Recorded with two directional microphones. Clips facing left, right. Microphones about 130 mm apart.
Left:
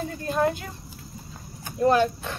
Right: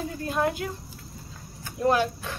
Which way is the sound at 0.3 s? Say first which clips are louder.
Left 3 dB; 5° right (ahead or behind).